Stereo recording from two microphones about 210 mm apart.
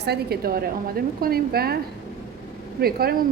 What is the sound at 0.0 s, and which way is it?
A woman's voice, 50° right (ahead or behind).